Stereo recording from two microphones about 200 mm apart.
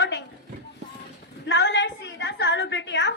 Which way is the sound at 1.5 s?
65° left (ahead or behind).